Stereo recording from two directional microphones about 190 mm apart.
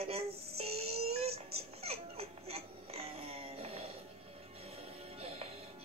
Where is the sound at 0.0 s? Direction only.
30° right (ahead or behind).